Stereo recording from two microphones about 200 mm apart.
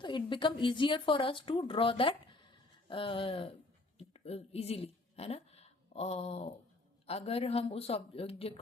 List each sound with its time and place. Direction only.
0.0 s a woman's voice: 25° left (ahead or behind)